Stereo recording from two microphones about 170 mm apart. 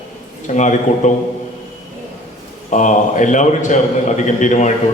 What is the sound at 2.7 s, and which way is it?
A man's voice, 45° left (ahead or behind).